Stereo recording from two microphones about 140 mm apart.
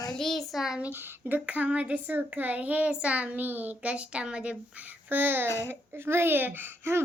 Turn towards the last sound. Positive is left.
turn(degrees=-15)  # may be behind; listen again after turning